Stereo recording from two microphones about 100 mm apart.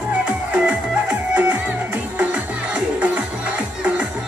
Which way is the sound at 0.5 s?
10° right (ahead or behind).